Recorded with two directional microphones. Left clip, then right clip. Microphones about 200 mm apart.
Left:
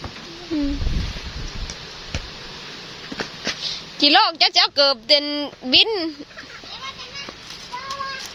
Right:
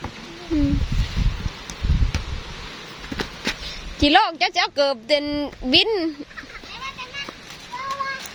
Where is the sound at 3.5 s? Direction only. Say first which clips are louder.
Even; 45° right (ahead or behind).